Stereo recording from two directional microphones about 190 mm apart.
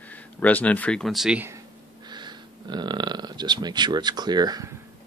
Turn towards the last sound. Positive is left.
turn(degrees=-20)  # may be behind; listen again after turning